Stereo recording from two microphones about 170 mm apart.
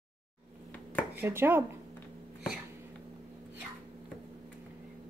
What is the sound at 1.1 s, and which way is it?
Speech, 10° right (ahead or behind).